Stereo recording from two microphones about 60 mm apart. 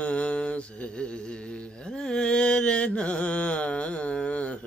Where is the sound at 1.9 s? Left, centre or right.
Centre.